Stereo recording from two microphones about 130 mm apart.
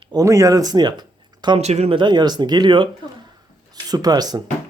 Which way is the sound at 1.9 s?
35° right (ahead or behind).